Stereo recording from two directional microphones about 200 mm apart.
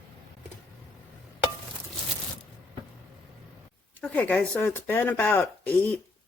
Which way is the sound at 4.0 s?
5° left (ahead or behind).